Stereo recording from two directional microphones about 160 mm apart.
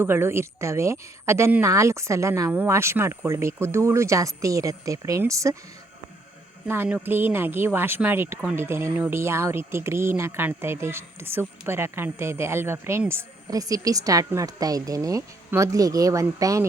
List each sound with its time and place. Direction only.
0.0 s speech: 15° right (ahead or behind)
6.7 s speech: 10° right (ahead or behind)